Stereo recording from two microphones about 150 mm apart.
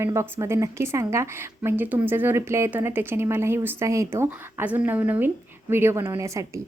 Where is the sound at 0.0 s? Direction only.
20° right (ahead or behind).